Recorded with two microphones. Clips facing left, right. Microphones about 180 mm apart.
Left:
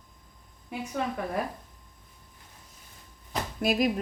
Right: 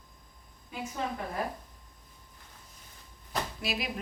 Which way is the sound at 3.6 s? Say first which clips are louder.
Left 14 dB; 50° left (ahead or behind).